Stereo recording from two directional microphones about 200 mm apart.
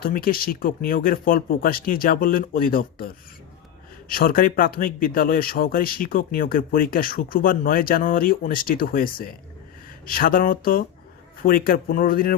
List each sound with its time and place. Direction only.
0.0 s speech: 45° left (ahead or behind)